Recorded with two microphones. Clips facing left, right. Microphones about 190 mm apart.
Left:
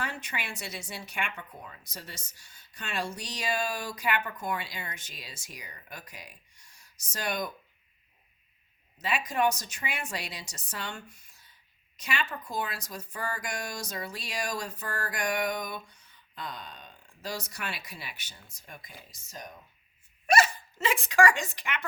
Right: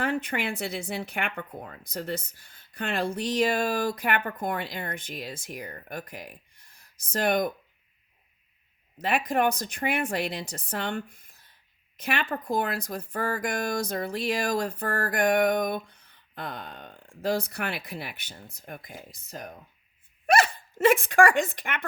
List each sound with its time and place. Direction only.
0.0 s speech: 55° right (ahead or behind)
9.0 s speech: 55° right (ahead or behind)